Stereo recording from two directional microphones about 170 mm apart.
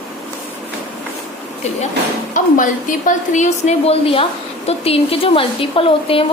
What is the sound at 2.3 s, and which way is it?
A woman's voice, 50° left (ahead or behind).